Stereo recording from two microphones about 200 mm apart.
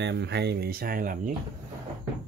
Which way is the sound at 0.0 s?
60° right (ahead or behind).